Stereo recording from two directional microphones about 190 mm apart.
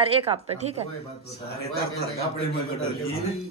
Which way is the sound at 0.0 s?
30° right (ahead or behind).